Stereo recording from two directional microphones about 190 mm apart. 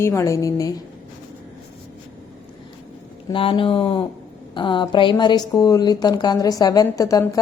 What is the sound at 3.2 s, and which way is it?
A woman's voice, 25° left (ahead or behind).